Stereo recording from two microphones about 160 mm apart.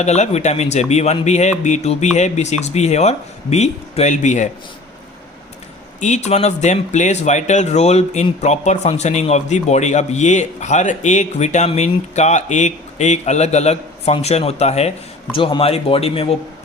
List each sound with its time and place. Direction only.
0.0 s speech: 45° left (ahead or behind)
6.0 s speech: 45° left (ahead or behind)